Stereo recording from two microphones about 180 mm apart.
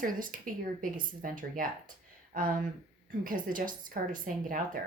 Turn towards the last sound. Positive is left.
turn(degrees=-50)  # may be behind; listen again after turning